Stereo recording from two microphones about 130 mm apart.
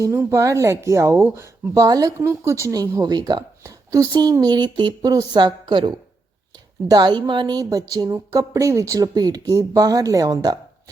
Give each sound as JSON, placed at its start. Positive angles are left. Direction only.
{"t": 0.0, "sound": "speech", "side_deg": -20}